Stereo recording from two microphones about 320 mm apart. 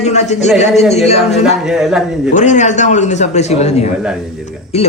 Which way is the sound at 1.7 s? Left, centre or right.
Centre.